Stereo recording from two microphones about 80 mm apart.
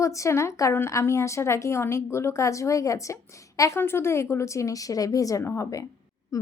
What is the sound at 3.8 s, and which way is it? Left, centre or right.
A woman's voice, left.